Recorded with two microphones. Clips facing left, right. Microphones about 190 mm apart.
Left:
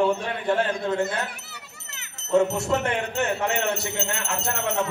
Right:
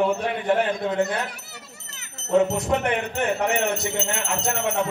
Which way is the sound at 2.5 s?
20° right (ahead or behind).